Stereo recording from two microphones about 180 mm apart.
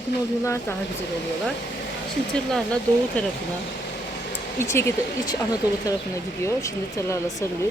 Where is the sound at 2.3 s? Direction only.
5° left (ahead or behind).